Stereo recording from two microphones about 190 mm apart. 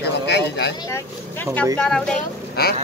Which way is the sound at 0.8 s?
15° left (ahead or behind).